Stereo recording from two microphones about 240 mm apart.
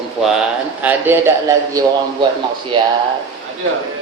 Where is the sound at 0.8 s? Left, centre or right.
Centre.